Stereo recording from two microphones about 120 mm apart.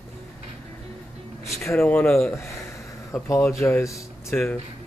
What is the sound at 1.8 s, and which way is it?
Speech, 10° left (ahead or behind).